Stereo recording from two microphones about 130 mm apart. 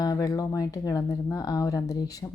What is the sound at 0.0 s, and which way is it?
Speech, 30° left (ahead or behind).